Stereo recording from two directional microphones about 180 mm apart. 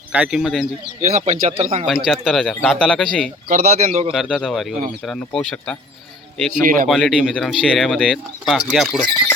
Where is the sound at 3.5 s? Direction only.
40° right (ahead or behind).